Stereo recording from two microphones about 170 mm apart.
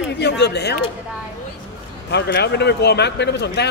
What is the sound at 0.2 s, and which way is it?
Speech, 80° left.